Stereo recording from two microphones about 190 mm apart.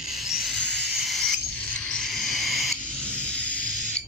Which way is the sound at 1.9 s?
Centre (ahead or behind).